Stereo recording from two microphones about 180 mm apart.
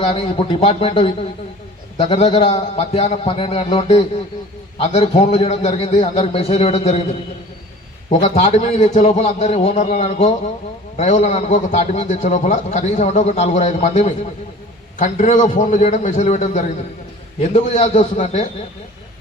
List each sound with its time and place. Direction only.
0.0 s a man's voice: 35° left (ahead or behind)
8.2 s a man's voice: 40° left (ahead or behind)